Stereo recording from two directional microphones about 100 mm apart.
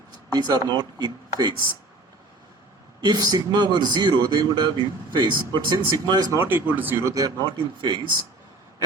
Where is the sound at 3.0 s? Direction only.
45° right (ahead or behind).